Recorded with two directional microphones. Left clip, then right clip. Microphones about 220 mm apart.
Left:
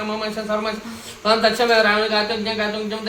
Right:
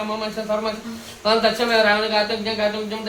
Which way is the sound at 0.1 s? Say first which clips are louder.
Left 2 dB; 20° left (ahead or behind).